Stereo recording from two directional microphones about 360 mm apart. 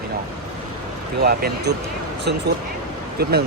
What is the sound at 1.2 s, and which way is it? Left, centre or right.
Speech, right.